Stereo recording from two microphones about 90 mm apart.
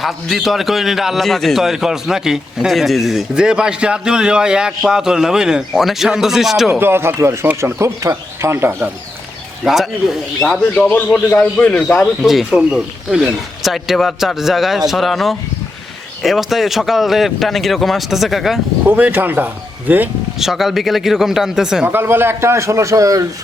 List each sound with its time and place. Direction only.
0.0 s a man's voice: centre (ahead or behind)
6.7 s a man's voice: 25° right (ahead or behind)
9.6 s a man's voice: centre (ahead or behind)
10.8 s a man's voice: 20° left (ahead or behind)
12.2 s a man's voice: 5° right (ahead or behind)
18.9 s a man's voice: 20° right (ahead or behind)
20.4 s a man's voice: 5° right (ahead or behind)
21.8 s a man's voice: 25° right (ahead or behind)